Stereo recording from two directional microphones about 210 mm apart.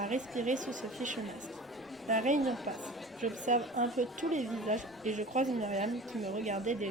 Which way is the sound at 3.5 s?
35° right (ahead or behind).